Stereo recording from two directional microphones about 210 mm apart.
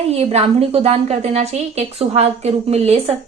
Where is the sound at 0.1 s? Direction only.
30° right (ahead or behind).